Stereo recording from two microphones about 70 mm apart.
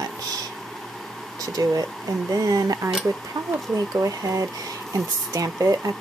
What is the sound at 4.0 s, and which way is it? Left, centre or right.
Speech, right.